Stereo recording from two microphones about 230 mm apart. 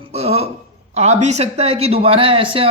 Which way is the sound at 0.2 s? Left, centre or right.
Right.